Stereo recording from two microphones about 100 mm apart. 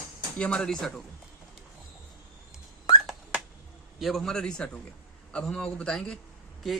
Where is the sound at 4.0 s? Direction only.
Centre (ahead or behind).